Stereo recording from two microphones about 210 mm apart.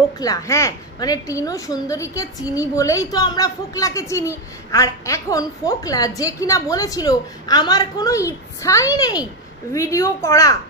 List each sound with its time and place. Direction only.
0.2 s a woman's voice: 15° left (ahead or behind)